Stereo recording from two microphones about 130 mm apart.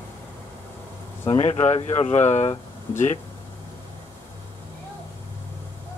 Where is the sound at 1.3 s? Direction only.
55° left (ahead or behind).